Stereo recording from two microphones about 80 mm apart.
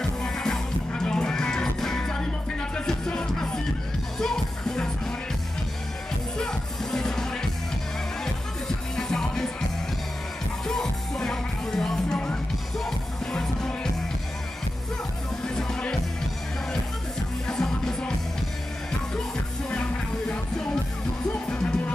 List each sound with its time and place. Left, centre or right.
0.2 s music: centre
6.3 s music: centre
8.6 s music: centre
10.7 s music: centre
15.4 s music: centre
17.5 s music: centre
19.7 s music: centre